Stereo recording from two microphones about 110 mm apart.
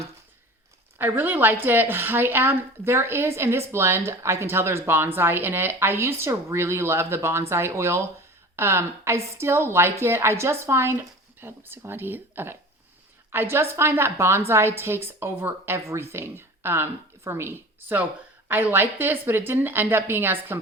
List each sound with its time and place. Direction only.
0.9 s a woman's voice: 20° right (ahead or behind)